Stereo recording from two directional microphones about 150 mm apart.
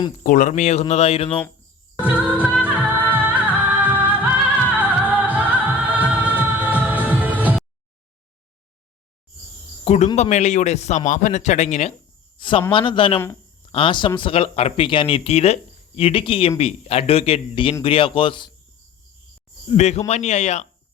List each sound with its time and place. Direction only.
0.2 s a man's voice: 60° left (ahead or behind); by 1.4 s 45° left (ahead or behind)
2.0 s music: 10° right (ahead or behind)
9.8 s a man's voice: 45° left (ahead or behind)
12.4 s a man's voice: 35° left (ahead or behind)
19.6 s a man's voice: 50° left (ahead or behind)